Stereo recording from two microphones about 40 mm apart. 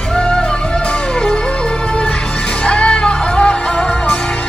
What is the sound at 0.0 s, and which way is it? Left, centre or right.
Music, left.